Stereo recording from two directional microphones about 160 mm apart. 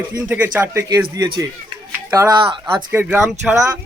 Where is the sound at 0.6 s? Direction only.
20° right (ahead or behind).